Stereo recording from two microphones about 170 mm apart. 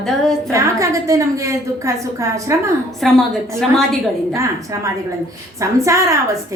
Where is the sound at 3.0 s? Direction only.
5° left (ahead or behind).